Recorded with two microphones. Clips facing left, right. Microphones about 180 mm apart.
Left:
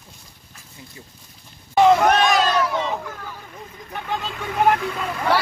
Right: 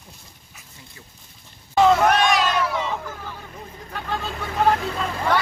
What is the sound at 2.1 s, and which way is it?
Crowd, 30° left (ahead or behind).